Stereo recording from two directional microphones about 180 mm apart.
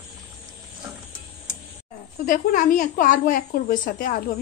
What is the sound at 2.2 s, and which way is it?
A woman's voice, 45° left (ahead or behind).